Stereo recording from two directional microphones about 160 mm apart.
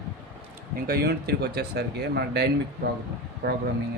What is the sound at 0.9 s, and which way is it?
Speech, 75° right (ahead or behind).